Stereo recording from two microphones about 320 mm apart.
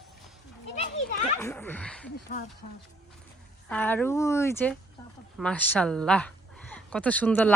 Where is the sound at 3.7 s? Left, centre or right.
Centre.